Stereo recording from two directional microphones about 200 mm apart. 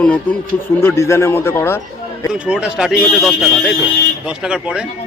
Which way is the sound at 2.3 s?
5° right (ahead or behind).